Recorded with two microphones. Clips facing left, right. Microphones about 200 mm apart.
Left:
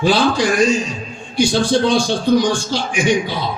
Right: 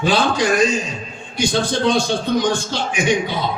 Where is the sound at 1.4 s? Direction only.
30° left (ahead or behind).